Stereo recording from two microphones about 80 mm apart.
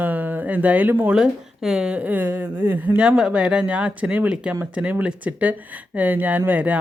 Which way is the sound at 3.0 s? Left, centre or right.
Centre.